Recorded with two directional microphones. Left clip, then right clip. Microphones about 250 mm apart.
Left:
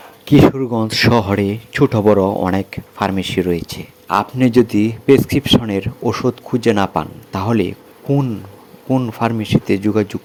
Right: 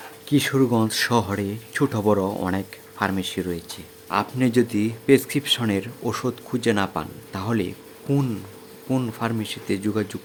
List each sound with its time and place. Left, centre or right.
0.3 s speech: left